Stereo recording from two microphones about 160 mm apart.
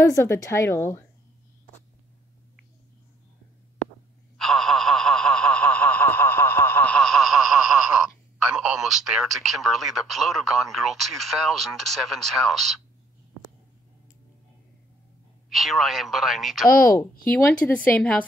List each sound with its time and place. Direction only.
0.1 s a woman's voice: 20° left (ahead or behind)
4.4 s snicker: centre (ahead or behind)
15.5 s speech: centre (ahead or behind)
16.6 s speech: 65° left (ahead or behind)
17.4 s a woman's voice: 10° left (ahead or behind)